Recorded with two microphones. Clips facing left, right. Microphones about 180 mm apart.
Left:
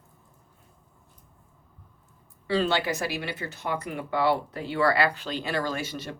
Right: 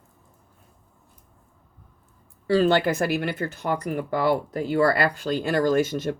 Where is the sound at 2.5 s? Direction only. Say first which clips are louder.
Right 6 dB; 45° right (ahead or behind).